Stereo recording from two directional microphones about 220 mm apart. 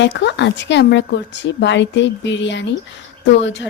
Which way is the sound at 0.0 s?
55° left (ahead or behind).